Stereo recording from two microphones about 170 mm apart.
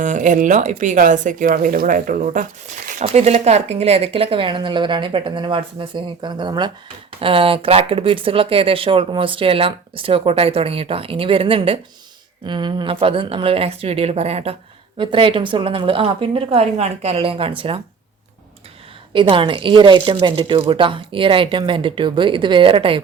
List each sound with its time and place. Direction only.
0.0 s speech: 45° right (ahead or behind)
3.0 s speech: 40° right (ahead or behind)
19.1 s speech: 30° right (ahead or behind)